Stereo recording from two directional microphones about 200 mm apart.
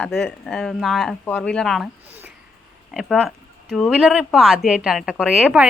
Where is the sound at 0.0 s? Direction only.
Centre (ahead or behind).